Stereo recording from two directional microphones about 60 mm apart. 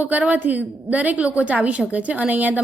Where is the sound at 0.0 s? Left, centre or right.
Right.